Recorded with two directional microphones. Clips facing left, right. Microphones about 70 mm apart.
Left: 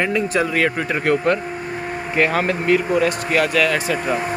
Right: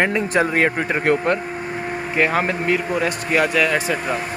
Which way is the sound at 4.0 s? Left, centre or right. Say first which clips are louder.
Left 2 dB; centre.